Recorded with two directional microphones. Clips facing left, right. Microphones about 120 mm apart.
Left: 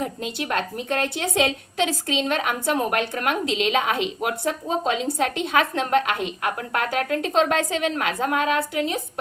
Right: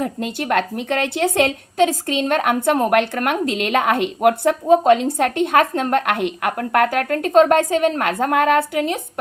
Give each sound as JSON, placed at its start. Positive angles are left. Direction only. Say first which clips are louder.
{"t": 0.0, "sound": "a woman's voice", "louder": "right 5 dB", "side_deg": -55}